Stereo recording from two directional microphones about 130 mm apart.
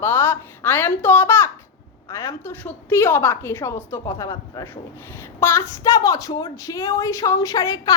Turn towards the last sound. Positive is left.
turn(degrees=25)  # may be behind; listen again after turning